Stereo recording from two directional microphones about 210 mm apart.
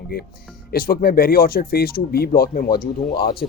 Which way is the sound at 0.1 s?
45° left (ahead or behind).